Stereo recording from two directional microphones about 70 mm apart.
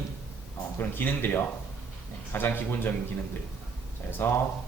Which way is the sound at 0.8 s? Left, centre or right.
Left.